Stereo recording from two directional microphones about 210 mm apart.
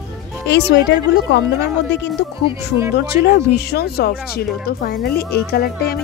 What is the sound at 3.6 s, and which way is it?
Speech, 50° left (ahead or behind).